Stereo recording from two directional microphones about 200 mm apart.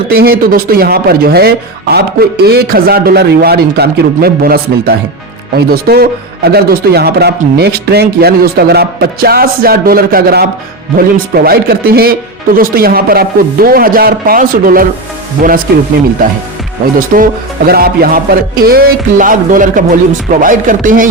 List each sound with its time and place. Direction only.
0.1 s speech: 50° right (ahead or behind)
17.1 s music: 40° right (ahead or behind)
17.7 s speech: 50° right (ahead or behind)
20.4 s music: 40° right (ahead or behind)